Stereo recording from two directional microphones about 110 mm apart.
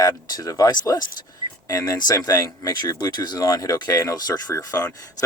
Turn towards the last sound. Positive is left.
turn(degrees=35)  # may be behind; listen again after turning